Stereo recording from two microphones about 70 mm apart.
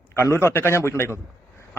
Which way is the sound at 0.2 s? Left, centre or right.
Left.